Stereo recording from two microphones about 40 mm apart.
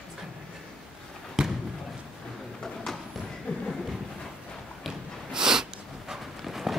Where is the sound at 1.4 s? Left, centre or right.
Centre.